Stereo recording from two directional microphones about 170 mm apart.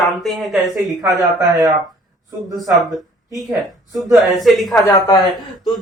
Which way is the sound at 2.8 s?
Centre (ahead or behind).